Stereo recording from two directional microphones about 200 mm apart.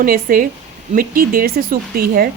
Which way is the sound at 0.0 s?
45° right (ahead or behind).